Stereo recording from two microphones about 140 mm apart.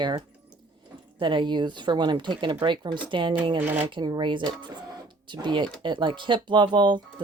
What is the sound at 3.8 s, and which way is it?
Speech, 35° right (ahead or behind).